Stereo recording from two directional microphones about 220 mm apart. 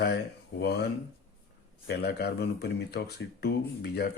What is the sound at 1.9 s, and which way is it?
Speech, 50° left (ahead or behind).